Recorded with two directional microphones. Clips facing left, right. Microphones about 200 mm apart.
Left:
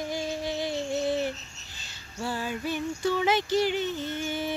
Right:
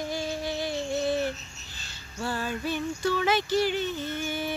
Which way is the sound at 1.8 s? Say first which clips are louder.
Even; 15° left (ahead or behind).